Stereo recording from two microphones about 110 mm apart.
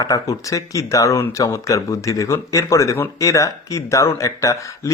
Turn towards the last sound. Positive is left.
turn(degrees=30)  # may be behind; listen again after turning